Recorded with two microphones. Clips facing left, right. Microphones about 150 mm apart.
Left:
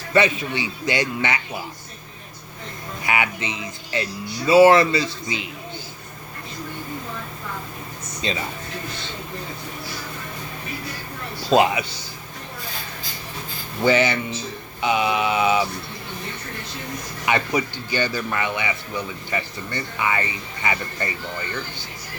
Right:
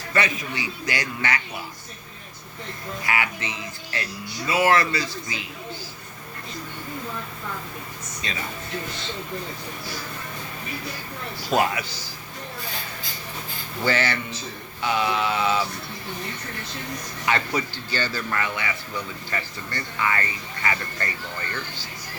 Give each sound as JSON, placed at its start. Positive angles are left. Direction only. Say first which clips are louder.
{"t": 0.1, "sound": "speech", "louder": "left 6 dB", "side_deg": 25}
{"t": 3.0, "sound": "speech", "louder": "left 3 dB", "side_deg": 20}
{"t": 8.2, "sound": "speech", "louder": "left 7 dB", "side_deg": 30}
{"t": 11.4, "sound": "speech", "louder": "left 5 dB", "side_deg": 20}
{"t": 13.8, "sound": "speech", "louder": "left 6 dB", "side_deg": 20}
{"t": 17.2, "sound": "speech", "louder": "left 3 dB", "side_deg": 15}